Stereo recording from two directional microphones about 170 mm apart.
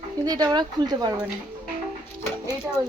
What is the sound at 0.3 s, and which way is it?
Speech, 20° right (ahead or behind).